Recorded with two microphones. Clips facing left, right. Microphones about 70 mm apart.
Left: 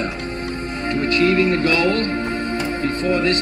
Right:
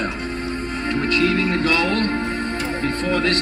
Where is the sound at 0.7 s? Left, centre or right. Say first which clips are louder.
Left 1 dB; left.